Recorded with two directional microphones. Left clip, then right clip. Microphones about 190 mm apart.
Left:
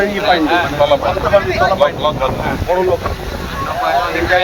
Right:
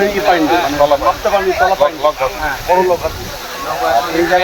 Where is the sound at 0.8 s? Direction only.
15° left (ahead or behind).